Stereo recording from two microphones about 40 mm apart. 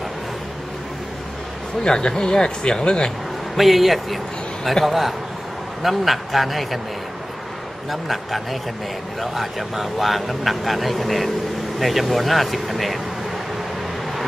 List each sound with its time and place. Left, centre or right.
1.8 s speech: centre
3.5 s speech: centre
7.9 s speech: centre